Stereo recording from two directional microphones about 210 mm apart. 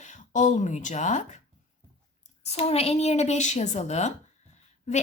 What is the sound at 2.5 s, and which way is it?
A woman's voice, 30° left (ahead or behind).